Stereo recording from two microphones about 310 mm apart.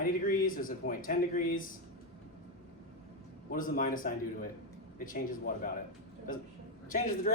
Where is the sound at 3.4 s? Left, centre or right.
Left.